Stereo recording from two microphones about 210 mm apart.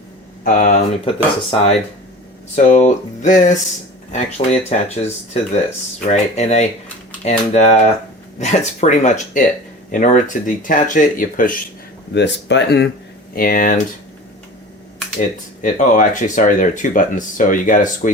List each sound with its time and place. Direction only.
0.4 s speech: 40° left (ahead or behind)
1.0 s speech: 25° left (ahead or behind)
12.1 s speech: 55° left (ahead or behind)
13.3 s speech: 45° left (ahead or behind)
15.6 s speech: 40° left (ahead or behind)